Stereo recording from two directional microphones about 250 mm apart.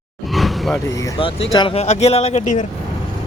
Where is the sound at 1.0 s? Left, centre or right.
Left.